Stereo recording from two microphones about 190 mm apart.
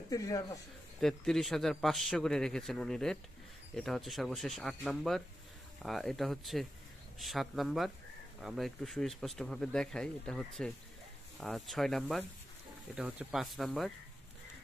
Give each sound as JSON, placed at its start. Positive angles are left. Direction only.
{"t": 0.1, "sound": "speech", "side_deg": 20}
{"t": 1.0, "sound": "speech", "side_deg": 0}